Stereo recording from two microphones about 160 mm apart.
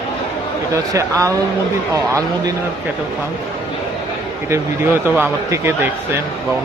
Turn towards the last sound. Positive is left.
turn(degrees=-15)  # may be behind; listen again after turning